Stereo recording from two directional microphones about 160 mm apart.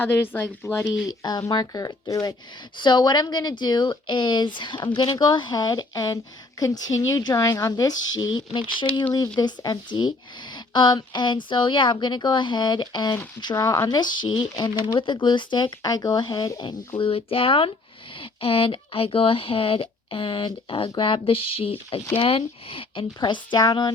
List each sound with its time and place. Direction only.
0.0 s a woman's voice: 15° left (ahead or behind)